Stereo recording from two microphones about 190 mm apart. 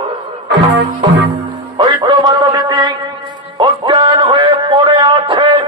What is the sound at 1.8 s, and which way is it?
Music, 25° right (ahead or behind).